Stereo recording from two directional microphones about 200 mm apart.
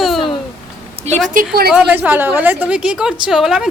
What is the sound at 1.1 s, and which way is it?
Speech, 40° right (ahead or behind).